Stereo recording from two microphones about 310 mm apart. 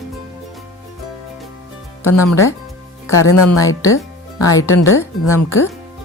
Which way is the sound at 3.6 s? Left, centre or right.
Centre.